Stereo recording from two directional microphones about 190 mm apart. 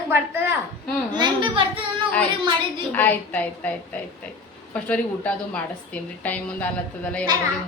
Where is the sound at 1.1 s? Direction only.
25° right (ahead or behind).